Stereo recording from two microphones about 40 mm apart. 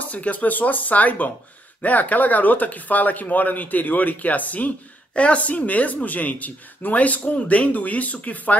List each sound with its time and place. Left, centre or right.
0.0 s speech: left